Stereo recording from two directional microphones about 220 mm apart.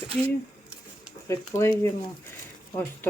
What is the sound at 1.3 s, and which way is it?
Speech, 10° left (ahead or behind).